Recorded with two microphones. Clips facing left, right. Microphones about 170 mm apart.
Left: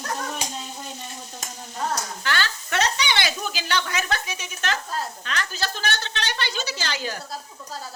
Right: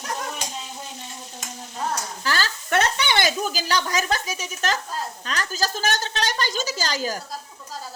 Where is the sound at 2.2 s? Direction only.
40° right (ahead or behind).